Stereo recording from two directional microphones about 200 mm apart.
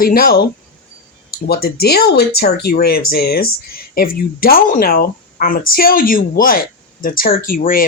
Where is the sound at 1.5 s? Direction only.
50° left (ahead or behind).